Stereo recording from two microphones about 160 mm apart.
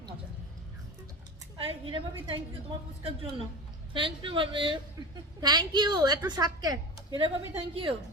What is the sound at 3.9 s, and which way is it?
A woman's voice, 30° right (ahead or behind).